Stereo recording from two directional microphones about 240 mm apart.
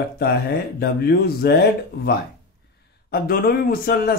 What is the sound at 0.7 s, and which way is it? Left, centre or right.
Speech, left.